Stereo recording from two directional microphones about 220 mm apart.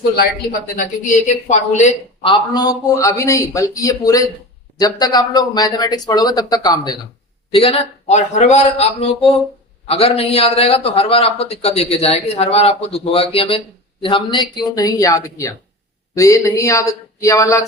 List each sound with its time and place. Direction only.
1.3 s speech: 35° left (ahead or behind)
2.3 s a man's voice: 20° left (ahead or behind)